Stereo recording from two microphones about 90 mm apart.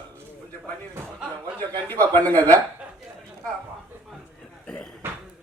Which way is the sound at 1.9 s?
20° left (ahead or behind).